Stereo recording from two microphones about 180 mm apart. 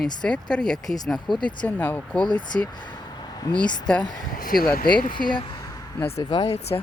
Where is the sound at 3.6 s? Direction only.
25° left (ahead or behind).